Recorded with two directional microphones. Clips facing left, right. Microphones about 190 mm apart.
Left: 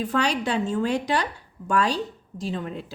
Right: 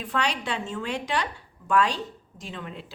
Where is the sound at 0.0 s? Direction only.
40° left (ahead or behind).